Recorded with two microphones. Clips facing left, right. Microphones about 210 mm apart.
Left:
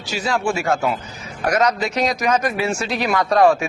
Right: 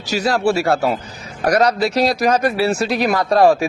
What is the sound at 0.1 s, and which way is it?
Speech, 40° right (ahead or behind).